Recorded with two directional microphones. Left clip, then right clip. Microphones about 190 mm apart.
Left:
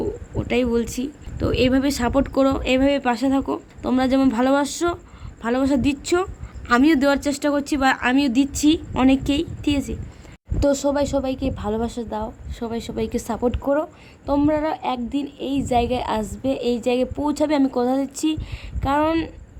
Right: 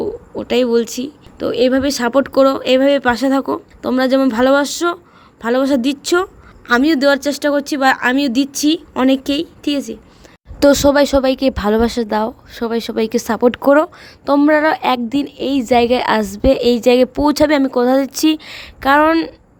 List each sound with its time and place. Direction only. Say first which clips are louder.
0.0 s speech: right 5 dB; 10° right (ahead or behind)
10.6 s a woman's voice: right 9 dB; 25° right (ahead or behind)
12.5 s a woman's voice: right 8 dB; 20° right (ahead or behind)